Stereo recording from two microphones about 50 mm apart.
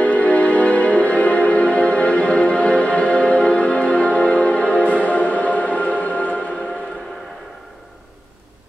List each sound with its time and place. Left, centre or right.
0.0 s music: left